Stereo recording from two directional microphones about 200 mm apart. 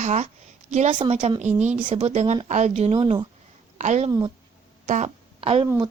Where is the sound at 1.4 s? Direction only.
35° right (ahead or behind).